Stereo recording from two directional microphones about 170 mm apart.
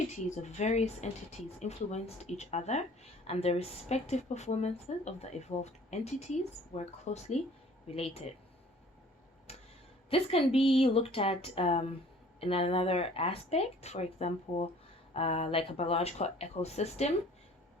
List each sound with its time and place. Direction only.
0.4 s speech: 40° left (ahead or behind)
9.5 s a sound: 40° left (ahead or behind)
10.1 s speech: 35° left (ahead or behind)